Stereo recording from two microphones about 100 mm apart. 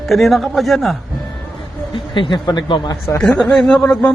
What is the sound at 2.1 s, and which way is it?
Speech, 55° left (ahead or behind).